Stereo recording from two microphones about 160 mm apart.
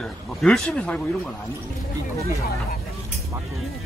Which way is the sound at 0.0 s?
5° left (ahead or behind).